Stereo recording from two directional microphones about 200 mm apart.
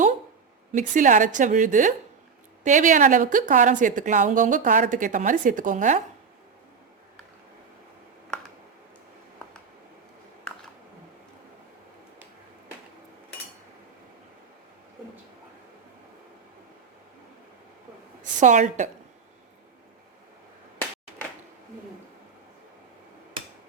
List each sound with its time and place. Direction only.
0.7 s a woman's voice: 40° right (ahead or behind)
18.2 s a woman's voice: 40° right (ahead or behind)